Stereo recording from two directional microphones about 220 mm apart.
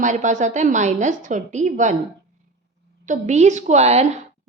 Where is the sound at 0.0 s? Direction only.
35° right (ahead or behind).